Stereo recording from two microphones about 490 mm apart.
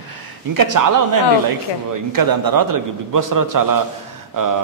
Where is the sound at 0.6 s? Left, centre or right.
Right.